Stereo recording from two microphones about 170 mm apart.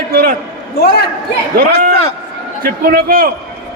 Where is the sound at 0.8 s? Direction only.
65° left (ahead or behind).